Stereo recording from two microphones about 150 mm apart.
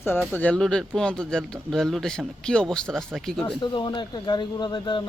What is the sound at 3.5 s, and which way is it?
Speech, 30° left (ahead or behind).